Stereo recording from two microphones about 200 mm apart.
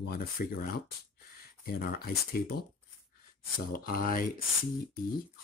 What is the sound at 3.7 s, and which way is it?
Speech, 45° left (ahead or behind).